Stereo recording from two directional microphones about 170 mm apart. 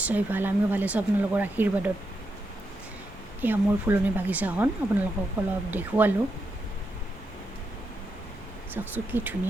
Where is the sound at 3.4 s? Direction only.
10° right (ahead or behind).